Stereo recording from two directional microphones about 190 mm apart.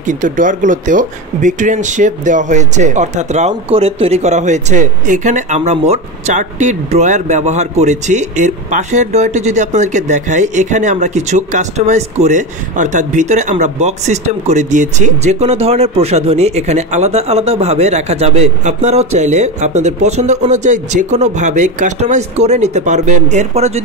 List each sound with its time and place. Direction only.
0.0 s speech: 40° right (ahead or behind)